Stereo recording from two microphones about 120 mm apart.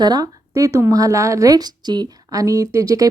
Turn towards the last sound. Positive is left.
turn(degrees=-30)  # may be behind; listen again after turning